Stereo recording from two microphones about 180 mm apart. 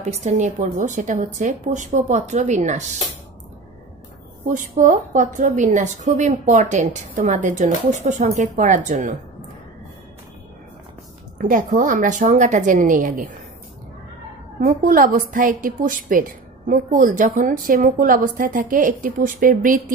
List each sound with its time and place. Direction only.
0.0 s a woman's voice: 40° right (ahead or behind)
4.5 s a woman's voice: 45° right (ahead or behind)
11.3 s a woman's voice: 45° right (ahead or behind)
14.6 s a woman's voice: 55° right (ahead or behind)